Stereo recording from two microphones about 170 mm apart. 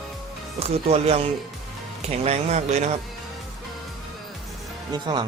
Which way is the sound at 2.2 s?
40° right (ahead or behind).